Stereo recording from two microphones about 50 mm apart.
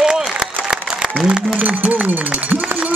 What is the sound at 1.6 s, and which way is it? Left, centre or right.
Speech, right.